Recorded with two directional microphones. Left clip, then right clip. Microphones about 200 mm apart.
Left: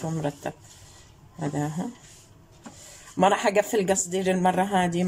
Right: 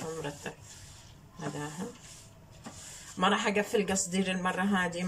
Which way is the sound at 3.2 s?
40° left (ahead or behind).